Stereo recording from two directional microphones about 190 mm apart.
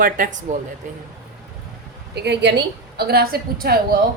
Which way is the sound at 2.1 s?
60° right (ahead or behind).